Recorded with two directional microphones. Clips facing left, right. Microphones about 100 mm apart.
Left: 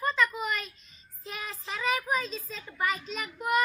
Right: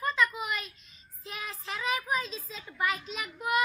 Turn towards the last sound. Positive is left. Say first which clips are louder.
# left 2 dB
turn(degrees=0)  # may be behind; listen again after turning